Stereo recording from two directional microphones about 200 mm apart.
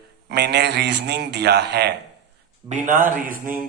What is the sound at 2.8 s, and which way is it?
Speech, 40° right (ahead or behind).